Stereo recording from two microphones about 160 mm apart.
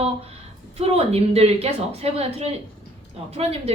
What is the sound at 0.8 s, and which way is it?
Speech, 40° right (ahead or behind).